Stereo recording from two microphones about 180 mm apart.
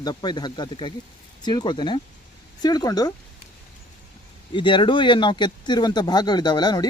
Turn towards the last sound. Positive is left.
turn(degrees=25)  # may be behind; listen again after turning